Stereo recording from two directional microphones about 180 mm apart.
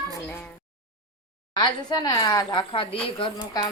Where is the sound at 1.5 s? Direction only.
25° left (ahead or behind).